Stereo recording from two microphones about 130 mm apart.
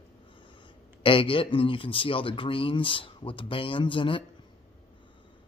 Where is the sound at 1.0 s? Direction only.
45° left (ahead or behind).